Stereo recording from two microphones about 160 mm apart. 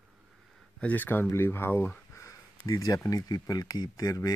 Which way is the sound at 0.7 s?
10° left (ahead or behind).